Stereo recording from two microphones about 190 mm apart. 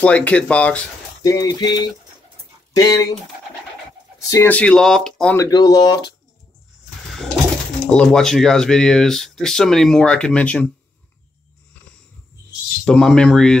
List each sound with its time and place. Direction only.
0.0 s speech: 5° left (ahead or behind)
1.2 s a sound: 20° left (ahead or behind)
2.7 s speech: 15° left (ahead or behind)
4.3 s speech: 10° left (ahead or behind)
5.4 s a sound: 20° left (ahead or behind)
7.8 s speech: 5° left (ahead or behind)
12.8 s speech: 5° left (ahead or behind)